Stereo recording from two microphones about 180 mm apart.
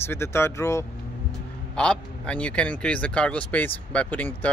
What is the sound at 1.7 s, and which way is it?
Speech, 5° left (ahead or behind).